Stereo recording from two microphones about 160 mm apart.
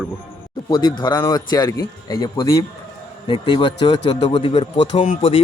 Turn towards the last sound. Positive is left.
turn(degrees=35)  # may be behind; listen again after turning